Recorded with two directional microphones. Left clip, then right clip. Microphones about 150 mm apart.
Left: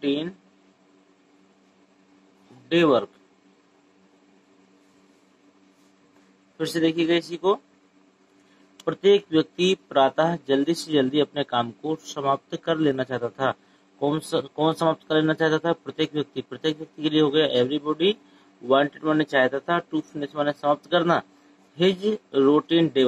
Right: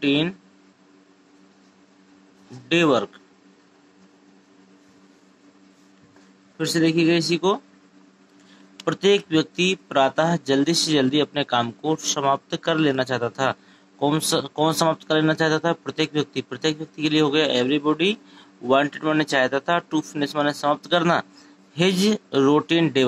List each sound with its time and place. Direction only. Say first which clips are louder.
0.0 s speech: right 5 dB; 30° right (ahead or behind)
2.5 s speech: even; 30° right (ahead or behind)
6.5 s a man's voice: right 3 dB; 25° right (ahead or behind)
8.7 s speech: even; 35° right (ahead or behind)